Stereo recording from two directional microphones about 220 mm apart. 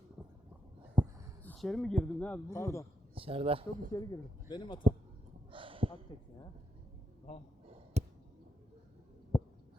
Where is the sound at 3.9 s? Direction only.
20° left (ahead or behind).